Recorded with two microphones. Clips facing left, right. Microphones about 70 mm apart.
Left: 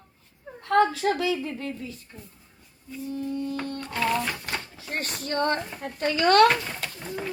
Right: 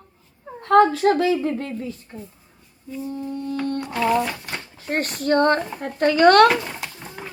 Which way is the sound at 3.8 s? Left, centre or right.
Centre.